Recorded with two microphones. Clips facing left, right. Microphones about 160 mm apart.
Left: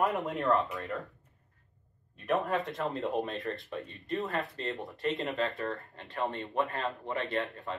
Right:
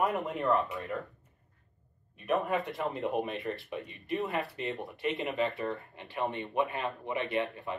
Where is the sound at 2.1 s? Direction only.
Centre (ahead or behind).